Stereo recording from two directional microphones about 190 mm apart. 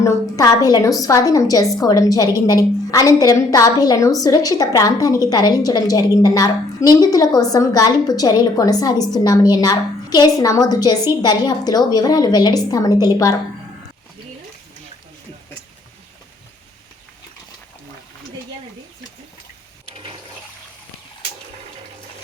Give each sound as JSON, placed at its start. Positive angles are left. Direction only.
{"t": 0.0, "sound": "a woman's voice", "side_deg": 20}